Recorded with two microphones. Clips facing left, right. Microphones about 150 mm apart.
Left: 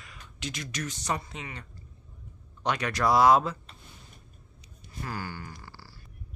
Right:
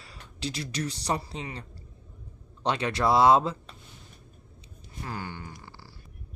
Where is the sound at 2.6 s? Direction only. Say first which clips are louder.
Right 1 dB; 25° right (ahead or behind).